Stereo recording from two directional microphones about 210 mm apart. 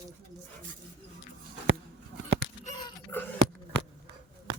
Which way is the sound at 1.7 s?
70° right (ahead or behind).